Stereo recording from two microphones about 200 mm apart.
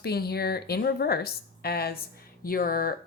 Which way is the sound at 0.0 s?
50° left (ahead or behind).